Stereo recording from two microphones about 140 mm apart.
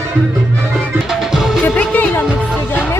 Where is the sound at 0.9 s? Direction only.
Centre (ahead or behind).